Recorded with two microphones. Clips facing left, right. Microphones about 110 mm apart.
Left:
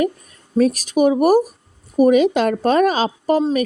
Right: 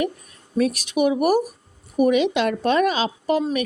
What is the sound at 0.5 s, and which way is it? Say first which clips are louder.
A woman's voice: left 5 dB; 40° left (ahead or behind).